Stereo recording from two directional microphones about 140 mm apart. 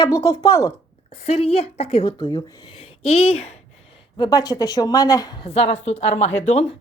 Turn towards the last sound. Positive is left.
turn(degrees=55)  # may be behind; listen again after turning